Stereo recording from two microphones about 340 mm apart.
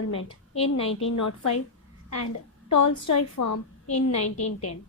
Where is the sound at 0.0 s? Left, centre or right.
Left.